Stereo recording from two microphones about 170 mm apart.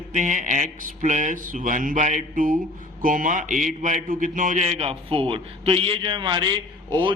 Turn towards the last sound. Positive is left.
turn(degrees=-30)  # may be behind; listen again after turning